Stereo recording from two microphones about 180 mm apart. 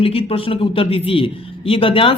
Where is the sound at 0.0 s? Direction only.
30° left (ahead or behind).